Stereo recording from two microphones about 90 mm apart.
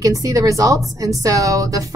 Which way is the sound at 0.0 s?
40° right (ahead or behind).